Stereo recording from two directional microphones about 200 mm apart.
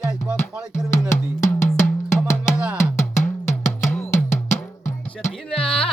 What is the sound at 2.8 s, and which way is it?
Drum, 35° left (ahead or behind).